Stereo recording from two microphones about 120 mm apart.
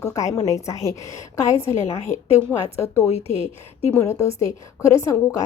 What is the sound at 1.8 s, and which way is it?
Speech, 75° left (ahead or behind).